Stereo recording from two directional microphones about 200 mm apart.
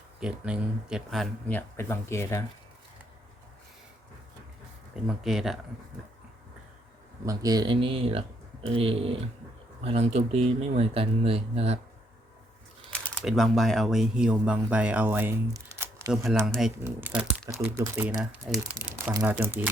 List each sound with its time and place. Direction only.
0.2 s speech: 5° right (ahead or behind); by 2.4 s 15° left (ahead or behind)
5.0 s speech: centre (ahead or behind)
7.3 s speech: 20° right (ahead or behind)
12.9 s speech: 5° left (ahead or behind); by 16.1 s 15° right (ahead or behind)
16.5 s speech: centre (ahead or behind)